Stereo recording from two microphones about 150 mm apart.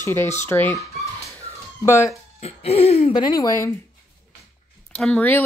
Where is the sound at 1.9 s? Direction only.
20° left (ahead or behind).